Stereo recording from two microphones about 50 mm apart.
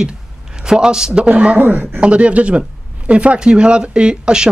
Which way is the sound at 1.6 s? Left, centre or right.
Right.